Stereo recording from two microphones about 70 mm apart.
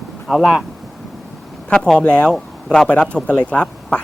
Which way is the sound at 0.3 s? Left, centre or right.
Centre.